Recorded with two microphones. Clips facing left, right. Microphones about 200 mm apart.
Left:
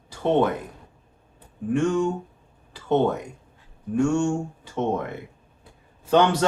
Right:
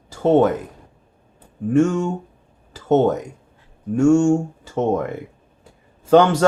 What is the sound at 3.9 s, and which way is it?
Speech, 45° right (ahead or behind).